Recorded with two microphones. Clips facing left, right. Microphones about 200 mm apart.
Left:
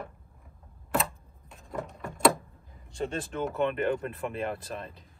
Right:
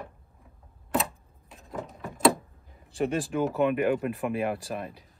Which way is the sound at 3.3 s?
10° right (ahead or behind).